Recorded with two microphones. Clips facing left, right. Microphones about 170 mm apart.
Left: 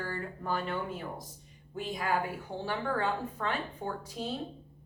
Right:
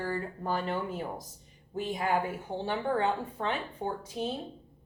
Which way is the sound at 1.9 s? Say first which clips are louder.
Right 2 dB; 25° right (ahead or behind).